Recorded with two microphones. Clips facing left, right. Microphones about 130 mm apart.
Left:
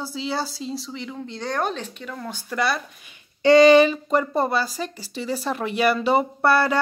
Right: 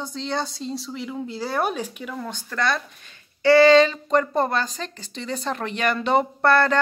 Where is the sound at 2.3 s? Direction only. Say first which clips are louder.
Left 1 dB; 10° left (ahead or behind).